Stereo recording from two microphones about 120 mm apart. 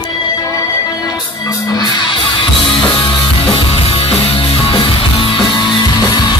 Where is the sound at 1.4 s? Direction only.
40° left (ahead or behind).